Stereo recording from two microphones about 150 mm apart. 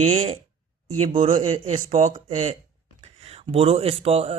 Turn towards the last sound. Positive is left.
turn(degrees=-40)  # may be behind; listen again after turning